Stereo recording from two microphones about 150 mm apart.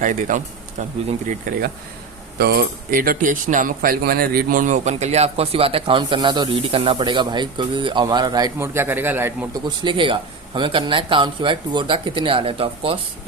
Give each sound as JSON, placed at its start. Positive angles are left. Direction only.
{"t": 0.0, "sound": "speech", "side_deg": -60}
{"t": 2.4, "sound": "speech", "side_deg": -85}
{"t": 9.6, "sound": "speech", "side_deg": -30}